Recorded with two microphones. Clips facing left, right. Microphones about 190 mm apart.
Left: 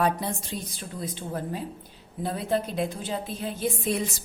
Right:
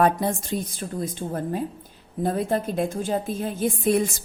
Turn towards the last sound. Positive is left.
turn(degrees=-50)  # may be behind; listen again after turning